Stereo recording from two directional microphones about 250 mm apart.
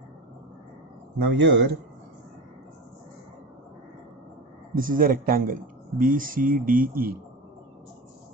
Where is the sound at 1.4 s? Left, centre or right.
Right.